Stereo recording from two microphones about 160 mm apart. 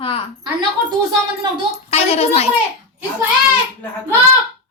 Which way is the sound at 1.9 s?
40° left (ahead or behind).